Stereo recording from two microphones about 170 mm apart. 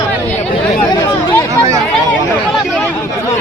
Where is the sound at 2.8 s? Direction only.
15° left (ahead or behind).